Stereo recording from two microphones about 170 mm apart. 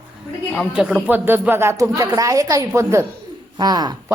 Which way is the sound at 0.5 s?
Centre (ahead or behind).